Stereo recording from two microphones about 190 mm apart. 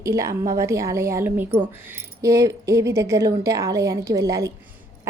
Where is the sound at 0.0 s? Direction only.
15° right (ahead or behind).